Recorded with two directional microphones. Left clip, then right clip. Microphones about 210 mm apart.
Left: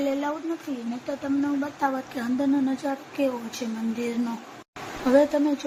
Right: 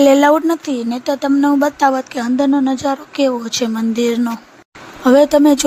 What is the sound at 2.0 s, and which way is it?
Speech, 40° right (ahead or behind).